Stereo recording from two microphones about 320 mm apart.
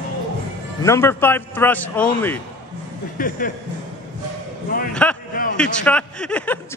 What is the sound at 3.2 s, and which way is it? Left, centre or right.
Speech, left.